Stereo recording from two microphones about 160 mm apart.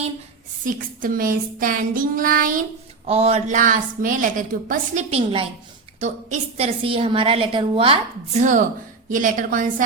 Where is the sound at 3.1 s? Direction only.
40° right (ahead or behind).